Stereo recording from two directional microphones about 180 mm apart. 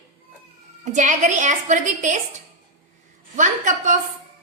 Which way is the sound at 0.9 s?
40° right (ahead or behind).